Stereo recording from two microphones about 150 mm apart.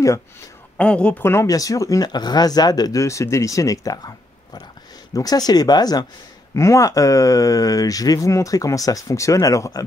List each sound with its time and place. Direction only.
0.7 s speech: 5° left (ahead or behind); by 4.1 s 25° left (ahead or behind)
5.1 s speech: 25° left (ahead or behind)